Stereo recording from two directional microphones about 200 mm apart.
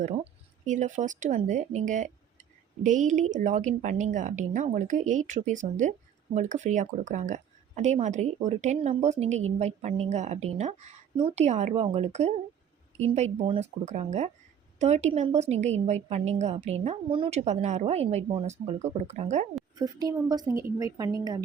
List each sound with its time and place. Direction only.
0.6 s speech: 40° right (ahead or behind)
19.7 s a woman's voice: 20° right (ahead or behind)